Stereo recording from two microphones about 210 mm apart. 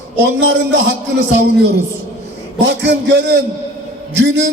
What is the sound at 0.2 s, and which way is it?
A man's voice, 55° right (ahead or behind).